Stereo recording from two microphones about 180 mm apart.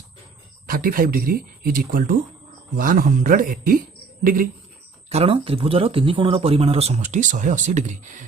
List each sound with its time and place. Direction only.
0.7 s speech: 55° right (ahead or behind)
5.0 s speech: 35° right (ahead or behind)